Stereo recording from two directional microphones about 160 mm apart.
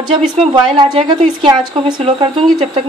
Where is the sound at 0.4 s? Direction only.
35° right (ahead or behind).